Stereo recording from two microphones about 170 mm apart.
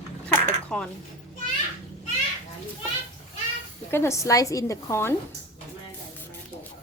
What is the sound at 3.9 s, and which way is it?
A woman's voice, 15° left (ahead or behind).